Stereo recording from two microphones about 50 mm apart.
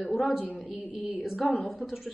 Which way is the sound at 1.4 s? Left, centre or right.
Centre.